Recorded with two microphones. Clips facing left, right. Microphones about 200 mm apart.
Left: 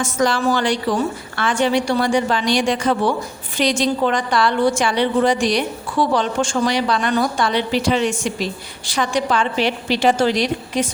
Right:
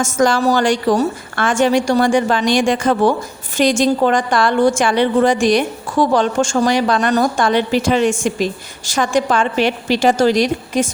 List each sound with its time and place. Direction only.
0.0 s a woman's voice: 45° right (ahead or behind)